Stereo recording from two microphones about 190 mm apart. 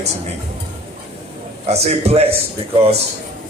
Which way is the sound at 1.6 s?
35° right (ahead or behind).